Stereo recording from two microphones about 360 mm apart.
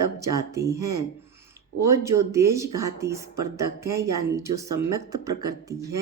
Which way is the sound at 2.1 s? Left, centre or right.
Right.